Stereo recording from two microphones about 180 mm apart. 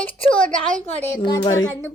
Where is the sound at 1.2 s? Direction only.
25° left (ahead or behind).